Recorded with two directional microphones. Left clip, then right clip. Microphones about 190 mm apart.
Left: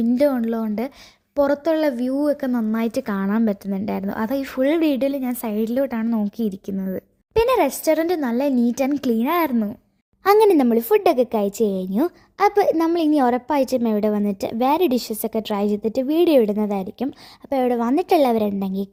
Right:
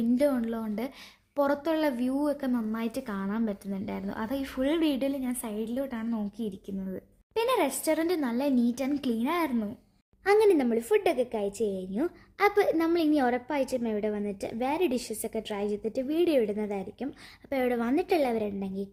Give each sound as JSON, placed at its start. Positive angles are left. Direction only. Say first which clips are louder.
{"t": 0.2, "sound": "a woman's voice", "louder": "left 8 dB", "side_deg": 35}
{"t": 17.5, "sound": "a woman's voice", "louder": "left 8 dB", "side_deg": 30}